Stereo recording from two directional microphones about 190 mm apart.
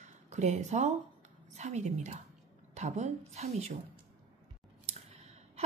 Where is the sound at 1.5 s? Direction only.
35° right (ahead or behind).